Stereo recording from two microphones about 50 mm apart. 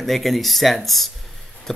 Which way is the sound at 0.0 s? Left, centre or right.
Centre.